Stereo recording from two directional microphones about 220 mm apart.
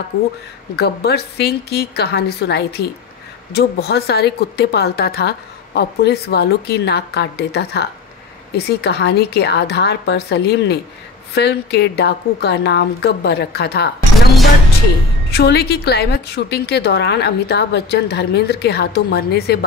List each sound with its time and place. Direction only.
0.7 s a woman's voice: 45° left (ahead or behind)
15.3 s a woman's voice: 45° left (ahead or behind)